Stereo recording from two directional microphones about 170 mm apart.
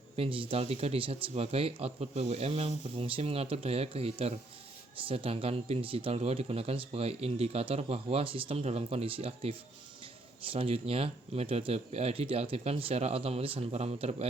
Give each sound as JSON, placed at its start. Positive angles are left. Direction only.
{"t": 0.2, "sound": "speech", "side_deg": -30}